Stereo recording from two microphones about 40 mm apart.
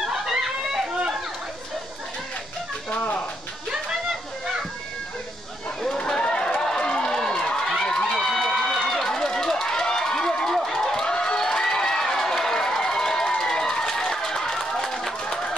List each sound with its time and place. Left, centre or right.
0.0 s a sound: centre
2.9 s speech: left
6.2 s run: left
7.6 s run: centre
10.4 s crowd: centre
15.2 s a sound: left